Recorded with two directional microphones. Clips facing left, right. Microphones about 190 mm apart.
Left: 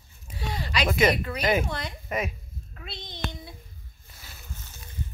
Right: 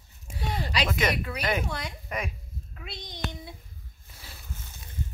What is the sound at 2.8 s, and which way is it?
Child singing, 15° right (ahead or behind).